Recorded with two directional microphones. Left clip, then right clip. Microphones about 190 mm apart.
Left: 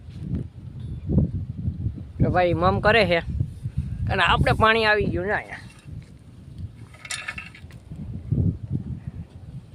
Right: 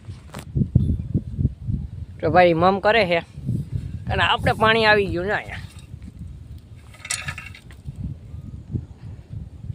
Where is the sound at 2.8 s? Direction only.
Centre (ahead or behind).